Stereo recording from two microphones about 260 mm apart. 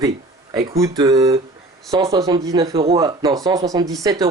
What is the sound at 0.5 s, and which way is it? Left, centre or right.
Speech, centre.